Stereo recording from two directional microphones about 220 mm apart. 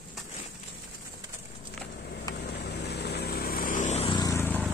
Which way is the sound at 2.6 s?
50° left (ahead or behind).